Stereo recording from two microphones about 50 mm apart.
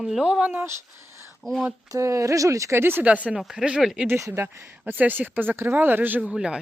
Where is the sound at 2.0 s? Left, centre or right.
Right.